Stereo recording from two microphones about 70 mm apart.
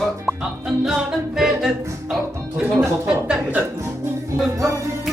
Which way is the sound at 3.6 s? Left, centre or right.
Right.